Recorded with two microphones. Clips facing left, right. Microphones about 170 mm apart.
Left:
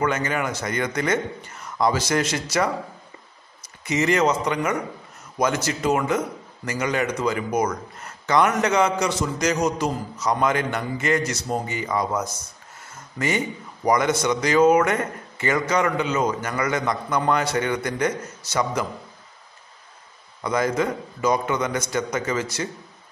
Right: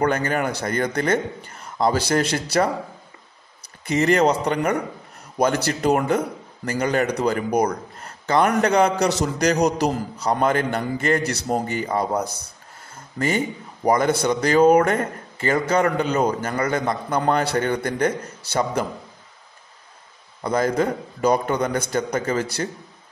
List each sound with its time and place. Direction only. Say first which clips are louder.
0.0 s a man's voice: right 3 dB; 35° right (ahead or behind)
3.9 s a man's voice: right 2 dB; 35° right (ahead or behind)
11.1 s speech: right 1 dB; 60° right (ahead or behind)
11.6 s a man's voice: right 2 dB; 35° right (ahead or behind)
20.4 s a man's voice: right 2 dB; 30° right (ahead or behind)